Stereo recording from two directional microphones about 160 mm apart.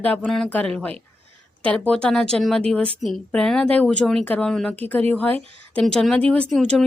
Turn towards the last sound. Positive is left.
turn(degrees=0)  # may be behind; listen again after turning